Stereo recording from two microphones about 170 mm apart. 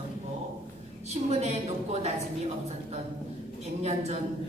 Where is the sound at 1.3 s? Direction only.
40° right (ahead or behind).